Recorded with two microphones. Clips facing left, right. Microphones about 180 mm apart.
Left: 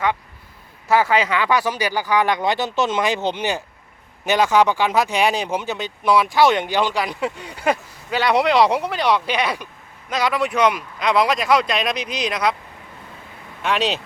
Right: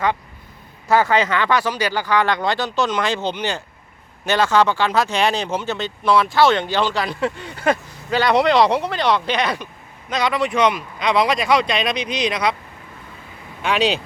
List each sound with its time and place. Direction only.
0.9 s speech: 5° left (ahead or behind)
13.6 s speech: centre (ahead or behind)